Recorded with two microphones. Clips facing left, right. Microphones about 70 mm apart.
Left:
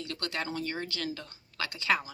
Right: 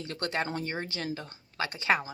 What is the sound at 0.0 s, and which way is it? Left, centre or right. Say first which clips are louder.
A woman's voice: right 3 dB; right.